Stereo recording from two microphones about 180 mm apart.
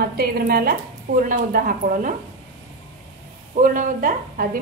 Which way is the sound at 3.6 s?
45° right (ahead or behind).